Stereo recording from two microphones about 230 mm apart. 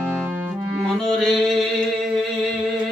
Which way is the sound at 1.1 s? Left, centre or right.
Centre.